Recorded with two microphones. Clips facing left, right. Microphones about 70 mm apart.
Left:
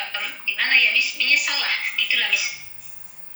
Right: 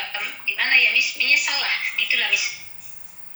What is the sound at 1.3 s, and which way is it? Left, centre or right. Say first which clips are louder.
Speech: even; centre.